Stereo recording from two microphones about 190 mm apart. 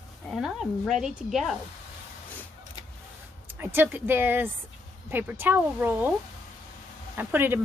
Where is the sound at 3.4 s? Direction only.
10° right (ahead or behind).